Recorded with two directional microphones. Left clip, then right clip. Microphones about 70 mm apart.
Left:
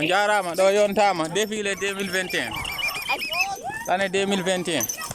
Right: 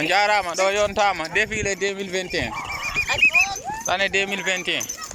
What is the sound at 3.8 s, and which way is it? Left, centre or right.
Speech, left.